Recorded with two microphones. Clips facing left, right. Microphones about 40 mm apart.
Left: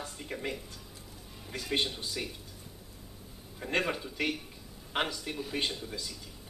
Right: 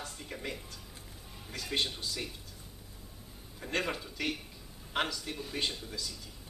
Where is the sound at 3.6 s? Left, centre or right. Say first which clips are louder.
Left 3 dB; centre.